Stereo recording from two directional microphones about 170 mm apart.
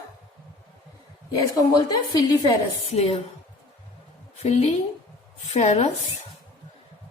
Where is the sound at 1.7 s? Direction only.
20° left (ahead or behind).